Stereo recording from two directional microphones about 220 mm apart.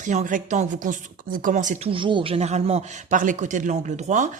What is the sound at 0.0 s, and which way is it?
Speech, 35° right (ahead or behind).